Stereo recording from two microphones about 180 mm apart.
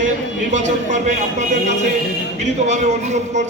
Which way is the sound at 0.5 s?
40° right (ahead or behind).